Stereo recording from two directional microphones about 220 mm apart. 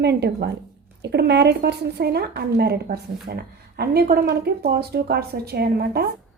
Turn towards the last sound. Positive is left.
turn(degrees=-45)  # may be behind; listen again after turning